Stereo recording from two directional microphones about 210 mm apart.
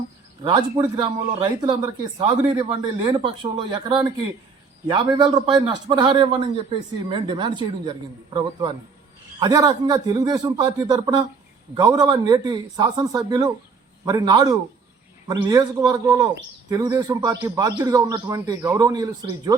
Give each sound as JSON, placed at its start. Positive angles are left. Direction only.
{"t": 0.4, "sound": "a man's voice", "side_deg": -20}